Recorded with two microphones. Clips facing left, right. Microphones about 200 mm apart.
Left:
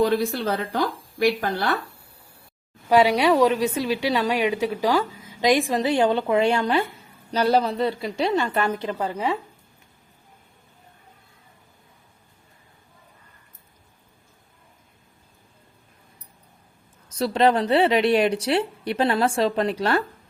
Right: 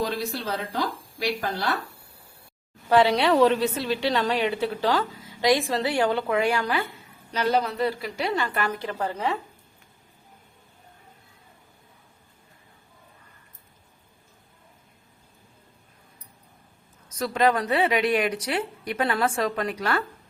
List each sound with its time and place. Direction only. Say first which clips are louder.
0.0 s a woman's voice: left 7 dB; 55° left (ahead or behind)
2.9 s a woman's voice: left 2 dB; 10° left (ahead or behind)
17.2 s a woman's voice: left 3 dB; 30° left (ahead or behind)